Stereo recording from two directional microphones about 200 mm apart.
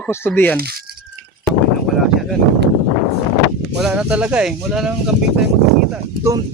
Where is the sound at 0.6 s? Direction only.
50° right (ahead or behind).